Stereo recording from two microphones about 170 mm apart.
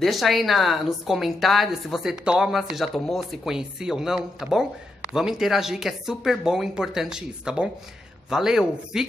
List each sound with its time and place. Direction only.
0.0 s a woman's voice: centre (ahead or behind)